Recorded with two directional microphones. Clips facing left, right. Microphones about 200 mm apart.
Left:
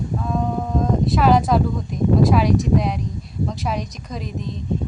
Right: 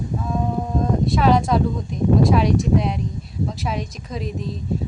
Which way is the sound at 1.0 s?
Centre (ahead or behind).